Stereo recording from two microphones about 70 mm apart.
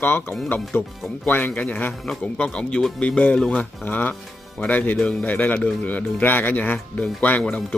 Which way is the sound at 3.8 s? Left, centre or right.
Left.